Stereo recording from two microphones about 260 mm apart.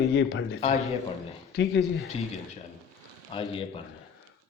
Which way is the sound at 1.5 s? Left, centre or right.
Left.